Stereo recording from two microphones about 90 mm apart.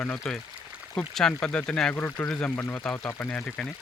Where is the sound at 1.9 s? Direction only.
20° left (ahead or behind).